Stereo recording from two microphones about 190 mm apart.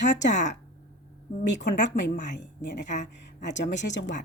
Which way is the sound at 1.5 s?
65° left (ahead or behind).